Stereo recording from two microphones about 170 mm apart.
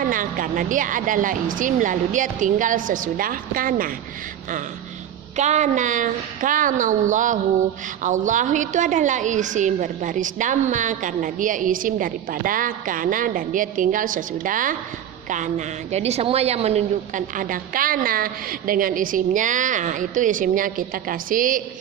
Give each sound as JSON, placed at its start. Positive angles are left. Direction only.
{"t": 0.0, "sound": "a woman's voice", "side_deg": -50}
{"t": 5.4, "sound": "a woman's voice", "side_deg": -45}